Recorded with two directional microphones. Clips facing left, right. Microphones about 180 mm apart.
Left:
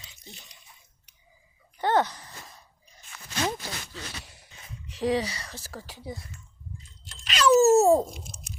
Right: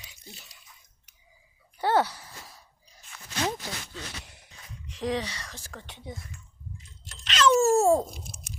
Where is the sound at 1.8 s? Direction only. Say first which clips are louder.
Even; 10° right (ahead or behind).